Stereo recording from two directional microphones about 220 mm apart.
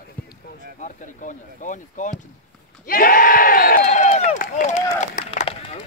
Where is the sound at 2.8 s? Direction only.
40° left (ahead or behind).